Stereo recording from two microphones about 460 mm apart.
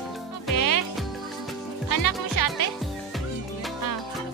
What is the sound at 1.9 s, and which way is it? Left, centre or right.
Music, left.